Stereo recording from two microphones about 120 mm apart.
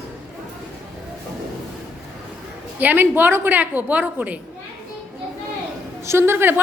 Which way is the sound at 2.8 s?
15° right (ahead or behind).